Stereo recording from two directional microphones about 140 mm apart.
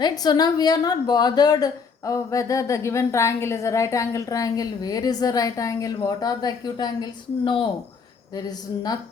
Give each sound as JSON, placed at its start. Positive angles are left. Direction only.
{"t": 0.0, "sound": "a woman's voice", "side_deg": 30}